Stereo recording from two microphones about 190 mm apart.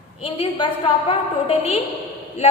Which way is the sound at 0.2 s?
30° left (ahead or behind).